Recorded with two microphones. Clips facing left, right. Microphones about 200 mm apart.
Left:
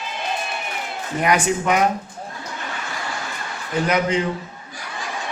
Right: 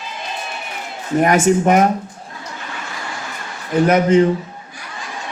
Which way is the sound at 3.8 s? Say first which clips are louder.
Right 8 dB; 50° right (ahead or behind).